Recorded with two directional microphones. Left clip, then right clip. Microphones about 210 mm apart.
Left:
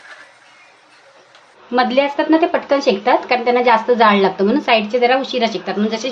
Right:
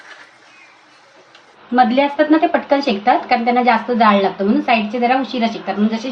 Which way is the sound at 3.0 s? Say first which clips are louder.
Even; 55° left (ahead or behind).